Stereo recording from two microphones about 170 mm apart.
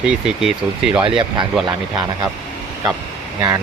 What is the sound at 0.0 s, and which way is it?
Speech, 5° right (ahead or behind).